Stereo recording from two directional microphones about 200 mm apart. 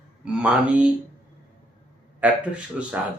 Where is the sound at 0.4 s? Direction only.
5° right (ahead or behind).